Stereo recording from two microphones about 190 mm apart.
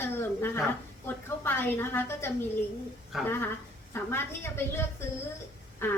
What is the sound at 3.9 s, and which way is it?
A woman's voice, 15° left (ahead or behind).